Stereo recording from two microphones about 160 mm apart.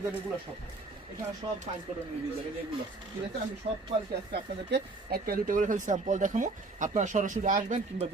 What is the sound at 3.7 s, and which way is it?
Speech, 40° right (ahead or behind).